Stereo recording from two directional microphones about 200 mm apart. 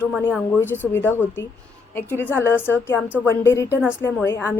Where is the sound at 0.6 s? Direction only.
10° left (ahead or behind).